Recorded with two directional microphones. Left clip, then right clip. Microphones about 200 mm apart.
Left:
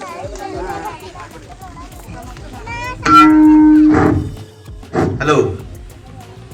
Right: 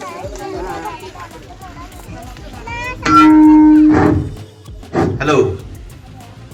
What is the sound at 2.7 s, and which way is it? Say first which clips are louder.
Music: left 2 dB; 15° right (ahead or behind).